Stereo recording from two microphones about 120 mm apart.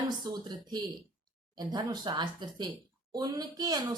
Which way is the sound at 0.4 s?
35° right (ahead or behind).